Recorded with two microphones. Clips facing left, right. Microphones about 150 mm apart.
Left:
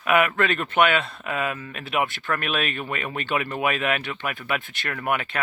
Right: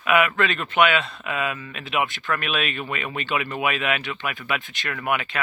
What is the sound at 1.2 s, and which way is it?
Speech, 35° left (ahead or behind).